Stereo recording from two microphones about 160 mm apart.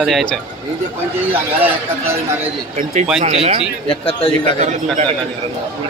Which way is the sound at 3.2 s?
40° right (ahead or behind).